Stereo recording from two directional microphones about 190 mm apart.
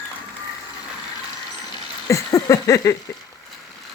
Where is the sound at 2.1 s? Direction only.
15° left (ahead or behind).